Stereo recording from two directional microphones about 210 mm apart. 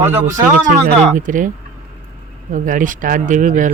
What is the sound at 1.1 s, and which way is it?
Speech, 40° right (ahead or behind).